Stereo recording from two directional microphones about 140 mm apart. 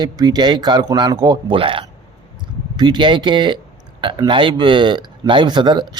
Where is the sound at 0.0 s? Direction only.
30° right (ahead or behind).